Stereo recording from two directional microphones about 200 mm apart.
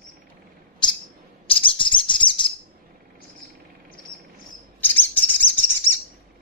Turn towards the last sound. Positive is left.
turn(degrees=10)  # may be behind; listen again after turning